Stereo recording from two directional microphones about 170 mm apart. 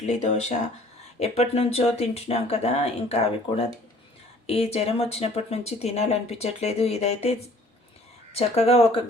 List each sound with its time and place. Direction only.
0.0 s speech: 40° left (ahead or behind)